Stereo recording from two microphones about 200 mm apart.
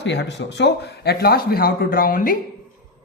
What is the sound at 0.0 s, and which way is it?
Speech, 60° left (ahead or behind).